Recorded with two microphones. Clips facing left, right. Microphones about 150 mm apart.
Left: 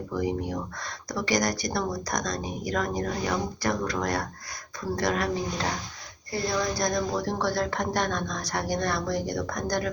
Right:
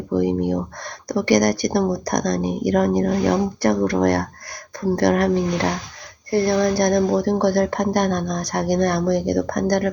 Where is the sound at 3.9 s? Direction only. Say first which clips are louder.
Right 10 dB; 60° right (ahead or behind).